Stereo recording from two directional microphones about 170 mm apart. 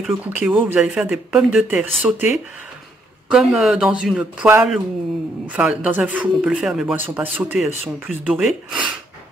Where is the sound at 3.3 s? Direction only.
Centre (ahead or behind).